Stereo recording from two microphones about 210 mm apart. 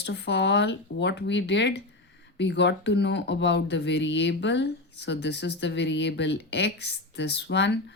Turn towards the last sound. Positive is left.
turn(degrees=55)  # may be behind; listen again after turning